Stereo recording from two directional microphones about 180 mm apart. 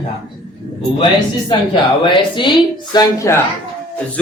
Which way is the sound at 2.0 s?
25° left (ahead or behind).